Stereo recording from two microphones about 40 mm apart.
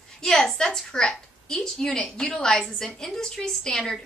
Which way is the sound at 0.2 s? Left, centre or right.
Centre.